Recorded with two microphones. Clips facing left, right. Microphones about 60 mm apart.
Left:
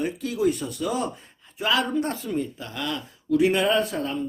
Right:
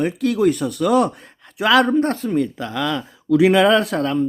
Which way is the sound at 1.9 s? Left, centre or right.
Right.